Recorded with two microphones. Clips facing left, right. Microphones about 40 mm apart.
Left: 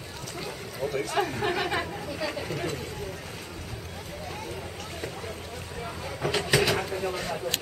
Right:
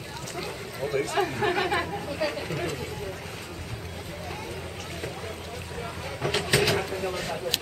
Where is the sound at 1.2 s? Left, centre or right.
Centre.